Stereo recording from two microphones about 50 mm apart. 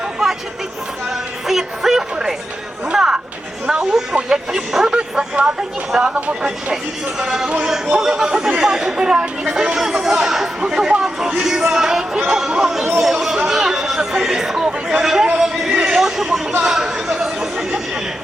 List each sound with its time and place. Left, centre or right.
1.1 s chatter: centre
2.8 s a sound: centre
3.7 s speech: centre
6.1 s speech: right
7.2 s speech: centre
13.3 s chatter: centre
15.4 s a sound: centre
15.8 s chatter: centre